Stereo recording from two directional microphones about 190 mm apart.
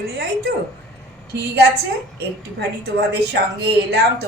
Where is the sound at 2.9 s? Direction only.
60° right (ahead or behind).